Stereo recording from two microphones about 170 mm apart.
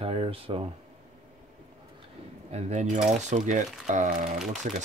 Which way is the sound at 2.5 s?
45° right (ahead or behind).